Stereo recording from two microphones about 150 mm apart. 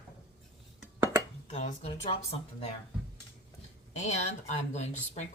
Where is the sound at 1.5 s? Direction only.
50° left (ahead or behind).